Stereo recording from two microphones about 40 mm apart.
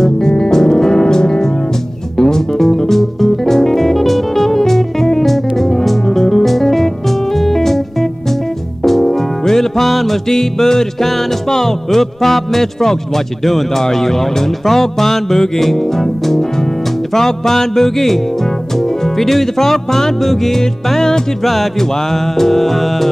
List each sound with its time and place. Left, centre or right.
0.0 s music: centre
8.8 s music: centre